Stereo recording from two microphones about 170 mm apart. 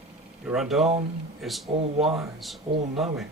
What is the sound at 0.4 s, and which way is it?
A man's voice, centre (ahead or behind).